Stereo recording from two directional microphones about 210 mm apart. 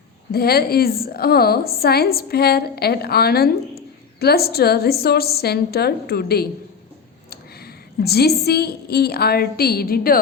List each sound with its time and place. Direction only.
0.3 s a woman's voice: 45° left (ahead or behind)